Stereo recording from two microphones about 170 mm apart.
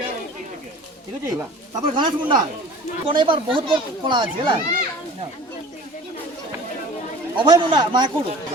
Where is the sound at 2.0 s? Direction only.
25° right (ahead or behind).